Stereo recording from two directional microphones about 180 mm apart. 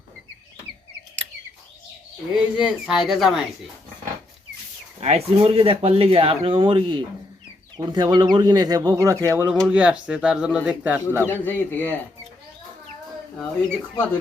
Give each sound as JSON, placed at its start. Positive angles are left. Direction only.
{"t": 2.3, "sound": "speech", "side_deg": -5}
{"t": 4.9, "sound": "speech", "side_deg": -35}
{"t": 9.6, "sound": "speech", "side_deg": -5}
{"t": 11.3, "sound": "a man's voice", "side_deg": 10}
{"t": 13.3, "sound": "speech", "side_deg": 5}